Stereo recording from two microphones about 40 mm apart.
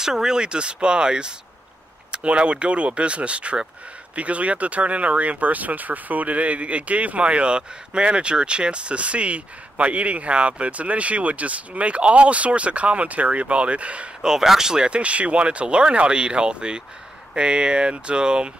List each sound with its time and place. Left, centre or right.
0.0 s speech: centre; by 14.1 s right
14.2 s speech: centre
15.0 s speech: right